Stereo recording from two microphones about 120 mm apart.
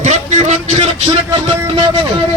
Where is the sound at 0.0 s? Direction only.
75° right (ahead or behind).